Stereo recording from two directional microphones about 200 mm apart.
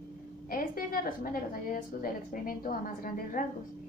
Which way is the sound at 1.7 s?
45° left (ahead or behind).